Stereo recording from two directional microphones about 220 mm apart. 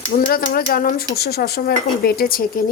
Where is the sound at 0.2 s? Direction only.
40° left (ahead or behind).